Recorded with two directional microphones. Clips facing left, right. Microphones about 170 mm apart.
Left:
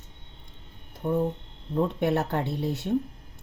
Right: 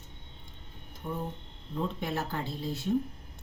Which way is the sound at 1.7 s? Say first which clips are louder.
Left 8 dB; 65° left (ahead or behind).